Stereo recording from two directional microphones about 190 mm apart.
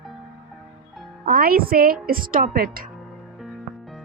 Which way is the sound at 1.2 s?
50° right (ahead or behind).